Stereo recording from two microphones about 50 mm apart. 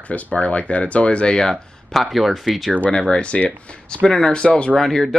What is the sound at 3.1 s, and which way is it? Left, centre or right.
Speech, left.